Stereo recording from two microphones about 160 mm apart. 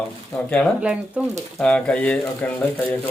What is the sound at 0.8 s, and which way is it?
Speech, 5° right (ahead or behind).